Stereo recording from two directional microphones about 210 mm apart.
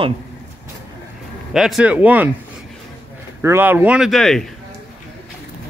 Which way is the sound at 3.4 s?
10° right (ahead or behind).